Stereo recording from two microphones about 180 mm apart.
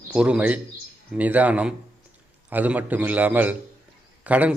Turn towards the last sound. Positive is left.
turn(degrees=-10)  # may be behind; listen again after turning